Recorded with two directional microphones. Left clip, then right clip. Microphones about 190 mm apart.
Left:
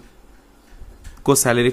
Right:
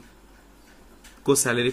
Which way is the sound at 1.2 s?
35° left (ahead or behind).